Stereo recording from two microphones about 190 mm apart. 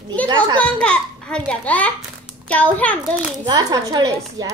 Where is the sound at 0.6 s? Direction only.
5° left (ahead or behind).